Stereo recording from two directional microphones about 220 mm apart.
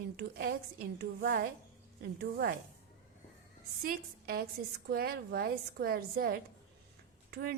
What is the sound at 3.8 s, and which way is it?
A woman's voice, 40° right (ahead or behind).